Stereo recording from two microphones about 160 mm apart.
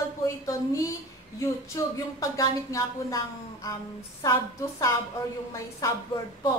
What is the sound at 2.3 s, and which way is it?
A woman's voice, 20° left (ahead or behind).